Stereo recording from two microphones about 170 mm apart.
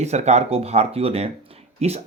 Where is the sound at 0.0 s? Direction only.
40° right (ahead or behind).